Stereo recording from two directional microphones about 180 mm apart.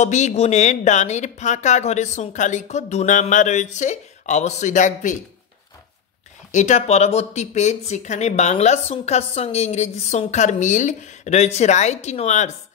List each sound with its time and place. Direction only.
0.0 s speech: 40° left (ahead or behind)
6.5 s speech: 40° left (ahead or behind)